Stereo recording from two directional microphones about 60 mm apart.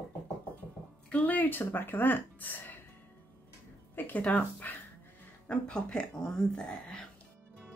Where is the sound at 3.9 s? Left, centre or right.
Left.